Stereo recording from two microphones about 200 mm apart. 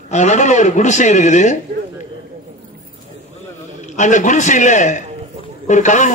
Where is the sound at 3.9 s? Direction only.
35° left (ahead or behind).